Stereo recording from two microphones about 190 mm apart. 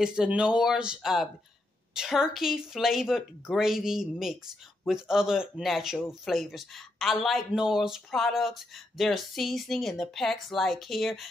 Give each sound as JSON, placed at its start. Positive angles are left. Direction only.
{"t": 0.0, "sound": "speech", "side_deg": -5}